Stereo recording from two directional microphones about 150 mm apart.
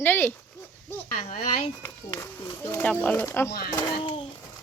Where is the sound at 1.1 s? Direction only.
55° left (ahead or behind).